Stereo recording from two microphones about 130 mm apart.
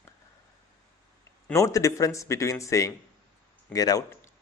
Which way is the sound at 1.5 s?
25° left (ahead or behind).